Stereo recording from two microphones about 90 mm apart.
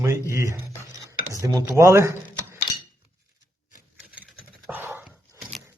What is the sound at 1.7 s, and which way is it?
Speech, 35° right (ahead or behind).